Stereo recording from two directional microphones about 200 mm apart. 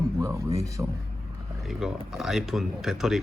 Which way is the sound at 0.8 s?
15° right (ahead or behind).